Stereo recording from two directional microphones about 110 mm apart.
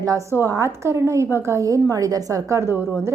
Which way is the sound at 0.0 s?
30° right (ahead or behind).